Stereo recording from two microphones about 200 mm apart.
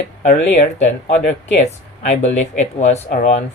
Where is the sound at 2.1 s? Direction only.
35° left (ahead or behind).